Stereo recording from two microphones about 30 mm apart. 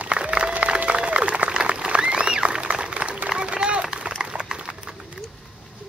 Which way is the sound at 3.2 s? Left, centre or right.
Right.